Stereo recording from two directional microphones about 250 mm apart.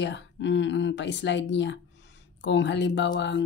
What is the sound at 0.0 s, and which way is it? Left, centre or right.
Speech, left.